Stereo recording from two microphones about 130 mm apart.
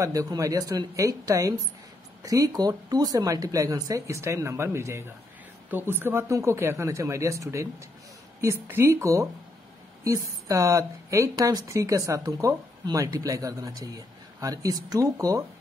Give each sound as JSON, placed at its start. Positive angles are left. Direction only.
{"t": 0.0, "sound": "speech", "side_deg": -25}